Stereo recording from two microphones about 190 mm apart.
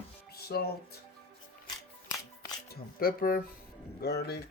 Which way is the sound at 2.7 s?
50° left (ahead or behind).